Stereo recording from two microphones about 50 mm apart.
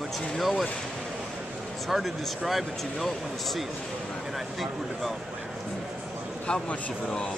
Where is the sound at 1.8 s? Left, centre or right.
Centre.